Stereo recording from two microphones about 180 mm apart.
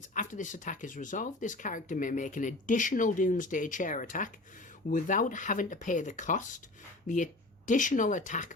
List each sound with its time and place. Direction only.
0.1 s speech: 45° left (ahead or behind)
7.7 s speech: 45° left (ahead or behind)